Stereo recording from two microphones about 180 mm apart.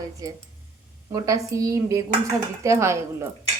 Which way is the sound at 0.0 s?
20° right (ahead or behind).